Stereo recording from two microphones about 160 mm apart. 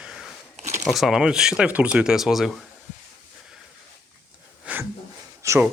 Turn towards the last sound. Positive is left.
turn(degrees=-20)  # may be behind; listen again after turning